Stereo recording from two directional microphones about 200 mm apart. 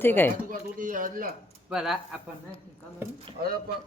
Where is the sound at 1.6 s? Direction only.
Centre (ahead or behind).